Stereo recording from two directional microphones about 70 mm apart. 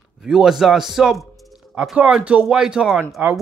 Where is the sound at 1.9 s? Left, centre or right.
Centre.